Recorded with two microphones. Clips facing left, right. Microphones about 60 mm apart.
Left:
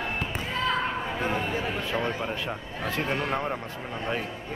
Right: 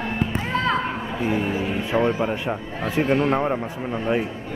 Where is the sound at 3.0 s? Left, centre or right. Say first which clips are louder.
Right 9 dB; right.